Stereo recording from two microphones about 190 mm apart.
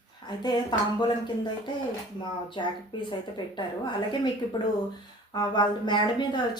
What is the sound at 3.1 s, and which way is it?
A woman's voice, 25° left (ahead or behind).